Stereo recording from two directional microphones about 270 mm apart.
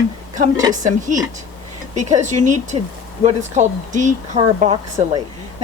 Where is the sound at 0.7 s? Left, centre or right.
Right.